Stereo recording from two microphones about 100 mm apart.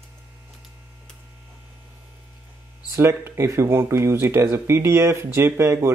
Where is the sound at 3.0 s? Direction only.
25° right (ahead or behind).